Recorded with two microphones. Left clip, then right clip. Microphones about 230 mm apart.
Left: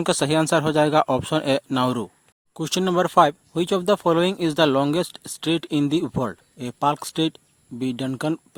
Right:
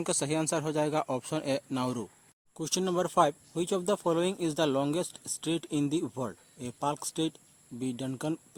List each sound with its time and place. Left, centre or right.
0.0 s speech: left